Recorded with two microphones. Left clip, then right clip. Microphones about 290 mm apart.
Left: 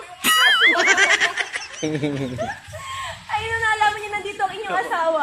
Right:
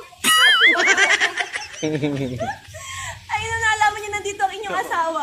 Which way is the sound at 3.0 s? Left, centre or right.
Left.